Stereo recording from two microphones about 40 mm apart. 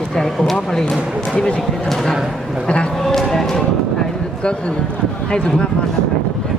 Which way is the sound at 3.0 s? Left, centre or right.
Centre.